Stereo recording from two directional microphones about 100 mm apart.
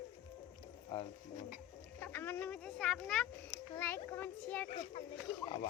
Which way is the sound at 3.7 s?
20° left (ahead or behind).